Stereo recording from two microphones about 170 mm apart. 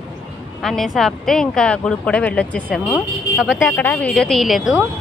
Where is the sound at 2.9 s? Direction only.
5° right (ahead or behind).